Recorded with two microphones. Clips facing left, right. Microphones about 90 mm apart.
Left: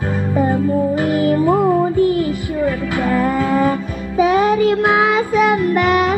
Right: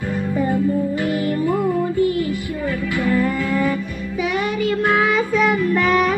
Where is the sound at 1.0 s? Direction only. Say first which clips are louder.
Left 5 dB; 75° left (ahead or behind).